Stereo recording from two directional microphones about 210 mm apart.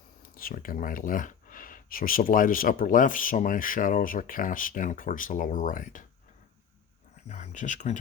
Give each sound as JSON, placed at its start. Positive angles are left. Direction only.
{"t": 0.2, "sound": "speech", "side_deg": 40}
{"t": 7.3, "sound": "speech", "side_deg": 35}